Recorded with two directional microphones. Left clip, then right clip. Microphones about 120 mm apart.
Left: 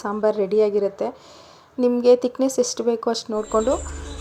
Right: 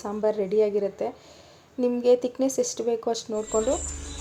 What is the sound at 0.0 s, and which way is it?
A woman's voice, 25° left (ahead or behind).